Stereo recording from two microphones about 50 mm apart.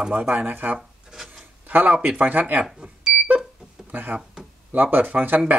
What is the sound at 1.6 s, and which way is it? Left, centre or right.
Speech, right.